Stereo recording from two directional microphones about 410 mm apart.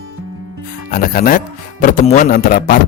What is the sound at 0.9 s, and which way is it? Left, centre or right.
Speech, left.